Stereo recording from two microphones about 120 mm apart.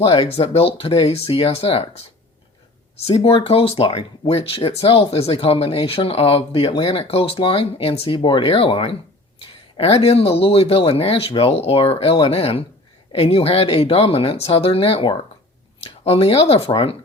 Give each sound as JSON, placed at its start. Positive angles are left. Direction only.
{"t": 0.0, "sound": "speech", "side_deg": 50}
{"t": 3.1, "sound": "speech", "side_deg": 55}